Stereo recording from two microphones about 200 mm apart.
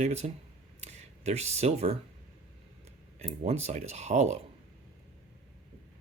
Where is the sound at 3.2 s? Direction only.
30° right (ahead or behind).